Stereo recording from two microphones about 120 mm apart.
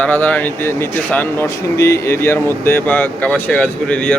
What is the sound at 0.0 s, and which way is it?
Speech, 15° left (ahead or behind).